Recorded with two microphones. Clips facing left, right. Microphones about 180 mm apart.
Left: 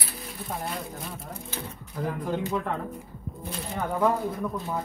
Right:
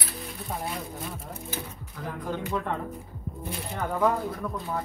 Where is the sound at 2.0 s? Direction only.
40° left (ahead or behind).